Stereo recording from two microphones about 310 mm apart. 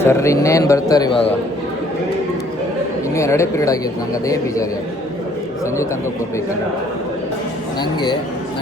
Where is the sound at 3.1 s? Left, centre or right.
Centre.